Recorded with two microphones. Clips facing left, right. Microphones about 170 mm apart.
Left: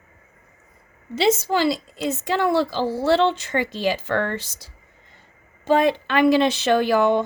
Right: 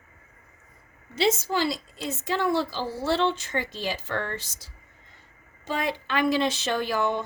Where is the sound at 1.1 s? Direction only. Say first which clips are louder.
Left 5 dB; 90° left.